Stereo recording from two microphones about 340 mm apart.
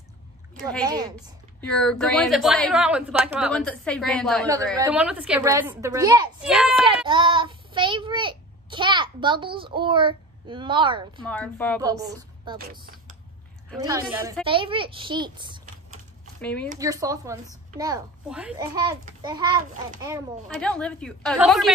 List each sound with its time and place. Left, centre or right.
0.8 s a child's voice: centre
1.6 s a woman's voice: centre
7.1 s a child's voice: centre
11.2 s a woman's voice: centre
11.8 s a woman's voice: centre
12.5 s speech: right
13.7 s a child's voice: centre
16.3 s speech: centre
16.7 s a child's voice: centre
20.4 s a woman's voice: centre